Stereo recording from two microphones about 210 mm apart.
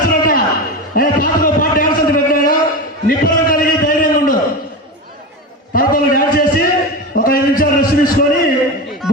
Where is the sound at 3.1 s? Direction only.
40° left (ahead or behind).